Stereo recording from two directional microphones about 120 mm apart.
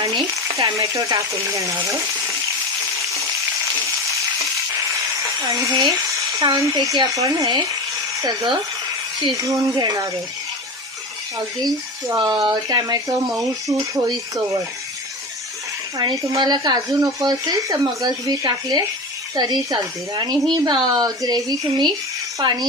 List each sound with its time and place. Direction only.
0.0 s speech: 30° right (ahead or behind)
5.4 s speech: 30° right (ahead or behind)
11.3 s speech: 30° right (ahead or behind)
16.0 s speech: 35° right (ahead or behind)